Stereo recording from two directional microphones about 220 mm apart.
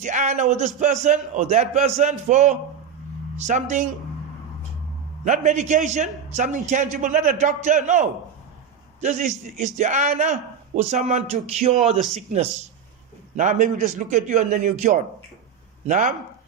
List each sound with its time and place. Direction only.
0.0 s a man's voice: 35° right (ahead or behind)
5.2 s a man's voice: 30° right (ahead or behind)